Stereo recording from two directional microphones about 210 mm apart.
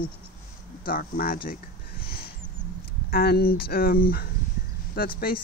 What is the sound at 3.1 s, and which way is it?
Speech, 45° left (ahead or behind).